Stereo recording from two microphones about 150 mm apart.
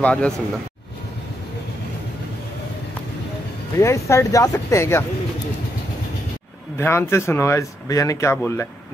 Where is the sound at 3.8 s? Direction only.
20° left (ahead or behind).